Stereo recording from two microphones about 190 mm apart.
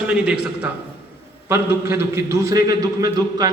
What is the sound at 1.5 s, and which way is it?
A man's voice, 15° right (ahead or behind).